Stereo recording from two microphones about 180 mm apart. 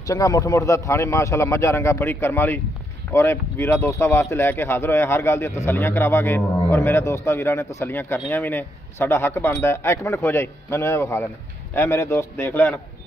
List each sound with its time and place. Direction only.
0.0 s speech: 20° left (ahead or behind)